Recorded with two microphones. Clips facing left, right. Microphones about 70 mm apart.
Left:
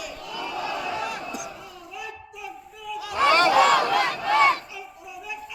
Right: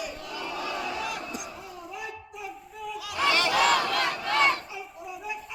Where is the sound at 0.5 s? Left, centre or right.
Left.